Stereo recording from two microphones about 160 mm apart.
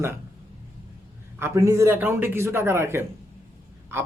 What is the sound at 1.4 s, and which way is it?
A man's voice, 20° right (ahead or behind).